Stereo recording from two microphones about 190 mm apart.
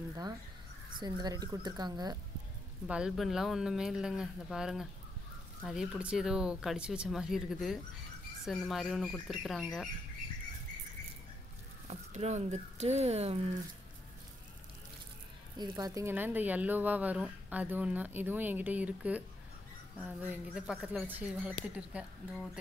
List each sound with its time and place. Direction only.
0.9 s speech: 20° right (ahead or behind)
2.9 s speech: 5° right (ahead or behind)
11.9 s speech: 35° right (ahead or behind)
15.5 s speech: 20° right (ahead or behind); by 22.5 s 5° right (ahead or behind)